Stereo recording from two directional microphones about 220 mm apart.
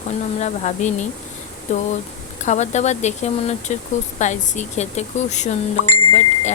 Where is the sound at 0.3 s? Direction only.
30° left (ahead or behind).